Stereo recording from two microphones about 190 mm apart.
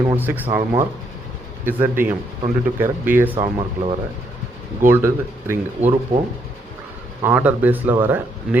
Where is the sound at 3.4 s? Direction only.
25° right (ahead or behind).